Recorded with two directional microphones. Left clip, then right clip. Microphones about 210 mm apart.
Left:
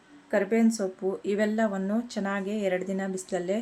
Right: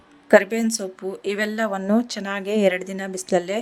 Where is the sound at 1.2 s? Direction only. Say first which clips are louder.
Right 4 dB; 45° right (ahead or behind).